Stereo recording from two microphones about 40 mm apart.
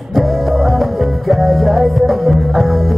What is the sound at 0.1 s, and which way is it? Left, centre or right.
Music, centre.